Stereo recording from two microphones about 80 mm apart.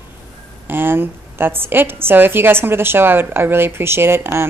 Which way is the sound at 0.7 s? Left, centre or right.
Right.